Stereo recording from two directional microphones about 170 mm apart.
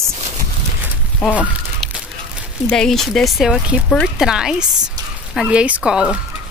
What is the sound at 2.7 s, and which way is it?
Speech, 5° left (ahead or behind).